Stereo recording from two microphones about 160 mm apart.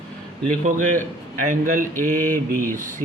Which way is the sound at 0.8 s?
50° right (ahead or behind).